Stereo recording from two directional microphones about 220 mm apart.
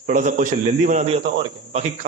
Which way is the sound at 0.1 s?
35° right (ahead or behind).